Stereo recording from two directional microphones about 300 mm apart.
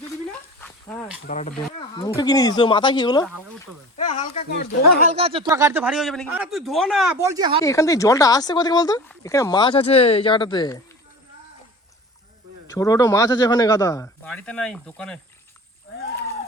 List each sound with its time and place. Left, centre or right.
0.6 s a sound: centre
1.3 s speech: left
2.0 s speech: centre
5.0 s speech: centre
7.6 s speech: centre
12.7 s speech: centre